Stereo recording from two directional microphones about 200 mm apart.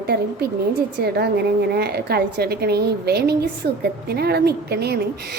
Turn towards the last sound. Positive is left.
turn(degrees=-55)  # may be behind; listen again after turning